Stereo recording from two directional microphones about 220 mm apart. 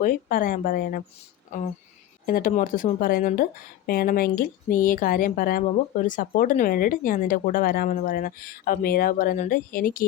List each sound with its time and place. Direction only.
0.0 s speech: 40° left (ahead or behind)
2.2 s speech: 40° left (ahead or behind)